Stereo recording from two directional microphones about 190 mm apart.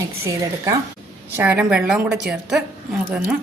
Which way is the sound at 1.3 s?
10° right (ahead or behind).